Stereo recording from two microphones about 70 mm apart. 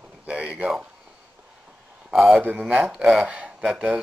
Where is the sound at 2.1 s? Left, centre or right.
Centre.